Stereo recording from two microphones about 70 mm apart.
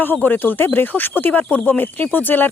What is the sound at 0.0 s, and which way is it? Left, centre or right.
Speech, left.